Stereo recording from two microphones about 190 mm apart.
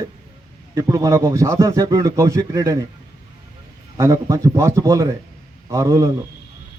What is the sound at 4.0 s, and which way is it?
Speech, 15° right (ahead or behind).